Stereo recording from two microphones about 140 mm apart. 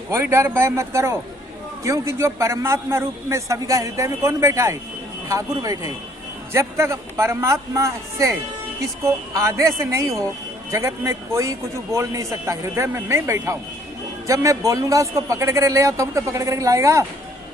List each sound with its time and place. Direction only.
0.1 s a man's voice: 20° right (ahead or behind)